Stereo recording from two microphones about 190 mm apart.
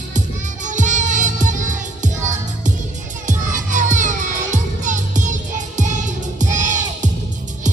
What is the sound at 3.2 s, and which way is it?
Music, 40° right (ahead or behind).